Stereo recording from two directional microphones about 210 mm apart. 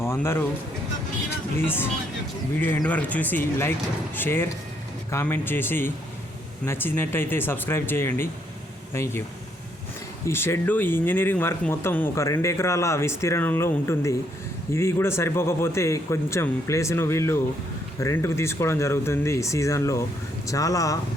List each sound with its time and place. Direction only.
0.0 s a sound: 10° left (ahead or behind)
1.5 s speech: 10° left (ahead or behind)
10.2 s speech: 10° left (ahead or behind)